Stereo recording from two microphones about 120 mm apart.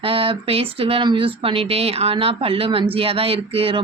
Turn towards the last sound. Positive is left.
turn(degrees=-50)  # may be behind; listen again after turning